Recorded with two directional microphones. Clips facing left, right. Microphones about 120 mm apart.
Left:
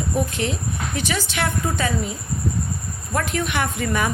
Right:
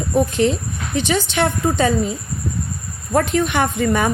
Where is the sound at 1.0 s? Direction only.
25° right (ahead or behind).